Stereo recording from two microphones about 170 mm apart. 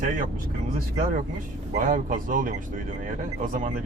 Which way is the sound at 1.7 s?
55° right (ahead or behind).